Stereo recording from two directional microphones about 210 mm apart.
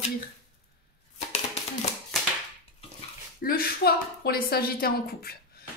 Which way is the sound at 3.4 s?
45° left (ahead or behind).